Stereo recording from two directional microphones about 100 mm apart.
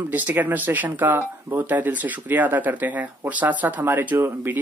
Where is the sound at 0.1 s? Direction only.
15° right (ahead or behind).